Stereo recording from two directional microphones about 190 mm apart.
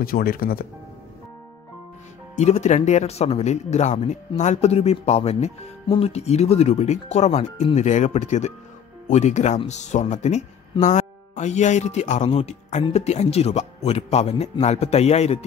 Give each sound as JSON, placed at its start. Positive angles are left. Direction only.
{"t": 0.0, "sound": "speech", "side_deg": 50}
{"t": 2.3, "sound": "speech", "side_deg": 35}